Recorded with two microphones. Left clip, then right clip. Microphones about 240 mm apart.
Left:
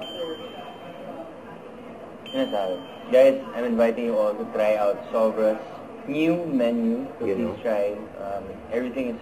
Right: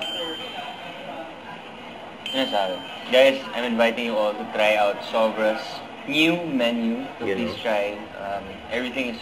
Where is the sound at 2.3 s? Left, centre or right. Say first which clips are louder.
Right 2 dB; centre.